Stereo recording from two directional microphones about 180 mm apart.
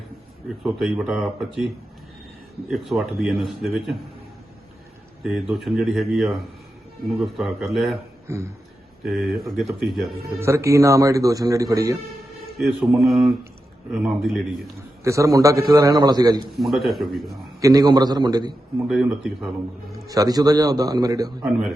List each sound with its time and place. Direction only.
0.6 s a man's voice: 5° right (ahead or behind)
5.2 s a man's voice: centre (ahead or behind)
8.3 s speech: 15° right (ahead or behind)
9.0 s a man's voice: centre (ahead or behind)
10.4 s speech: 15° right (ahead or behind)
12.5 s a man's voice: centre (ahead or behind)
15.0 s a man's voice: 15° right (ahead or behind)
16.5 s a man's voice: centre (ahead or behind)
17.6 s a man's voice: 20° right (ahead or behind)
18.9 s a man's voice: centre (ahead or behind)
20.1 s a man's voice: 20° right (ahead or behind)